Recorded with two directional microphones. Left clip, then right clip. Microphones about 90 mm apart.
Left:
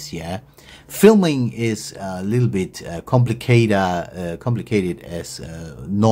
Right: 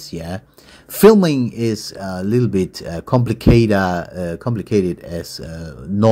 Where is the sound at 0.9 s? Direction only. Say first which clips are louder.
Right 3 dB; 40° right (ahead or behind).